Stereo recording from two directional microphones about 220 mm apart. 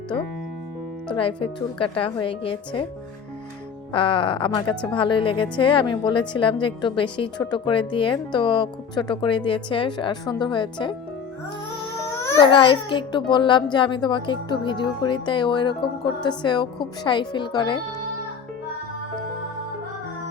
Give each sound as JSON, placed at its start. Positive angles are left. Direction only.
{"t": 1.1, "sound": "a woman's voice", "side_deg": 25}
{"t": 3.9, "sound": "a woman's voice", "side_deg": 25}
{"t": 12.1, "sound": "a woman's voice", "side_deg": 10}